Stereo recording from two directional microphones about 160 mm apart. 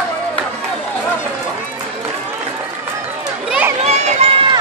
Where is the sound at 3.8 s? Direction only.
45° right (ahead or behind).